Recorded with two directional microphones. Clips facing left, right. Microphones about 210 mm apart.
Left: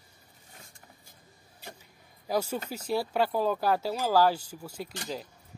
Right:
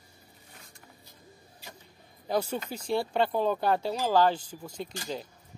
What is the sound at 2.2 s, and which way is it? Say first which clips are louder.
Speech: even; 5° left (ahead or behind).